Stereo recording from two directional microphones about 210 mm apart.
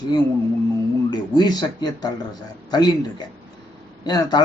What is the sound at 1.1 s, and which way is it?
A man's voice, 20° left (ahead or behind).